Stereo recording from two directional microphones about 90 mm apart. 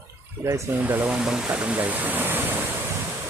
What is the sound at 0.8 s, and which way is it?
Speech, 20° right (ahead or behind).